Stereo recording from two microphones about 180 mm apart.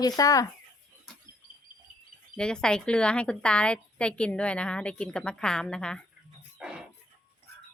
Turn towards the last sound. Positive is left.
turn(degrees=-5)  # may be behind; listen again after turning